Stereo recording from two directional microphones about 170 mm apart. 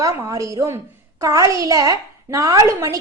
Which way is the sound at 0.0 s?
20° right (ahead or behind).